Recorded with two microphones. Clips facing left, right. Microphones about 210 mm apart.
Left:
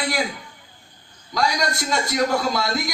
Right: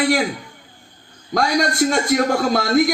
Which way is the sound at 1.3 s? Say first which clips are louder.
Right 4 dB; 50° right (ahead or behind).